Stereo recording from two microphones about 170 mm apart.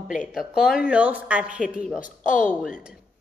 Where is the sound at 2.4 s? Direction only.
10° left (ahead or behind).